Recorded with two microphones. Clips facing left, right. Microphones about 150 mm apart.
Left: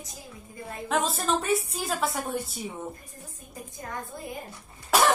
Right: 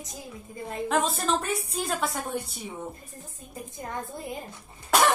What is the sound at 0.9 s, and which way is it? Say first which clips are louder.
A woman's voice: even; centre (ahead or behind).